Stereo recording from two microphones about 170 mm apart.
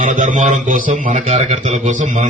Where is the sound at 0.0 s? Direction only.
50° right (ahead or behind).